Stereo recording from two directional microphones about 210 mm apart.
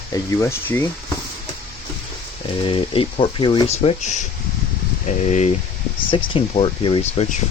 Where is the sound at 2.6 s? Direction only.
25° left (ahead or behind).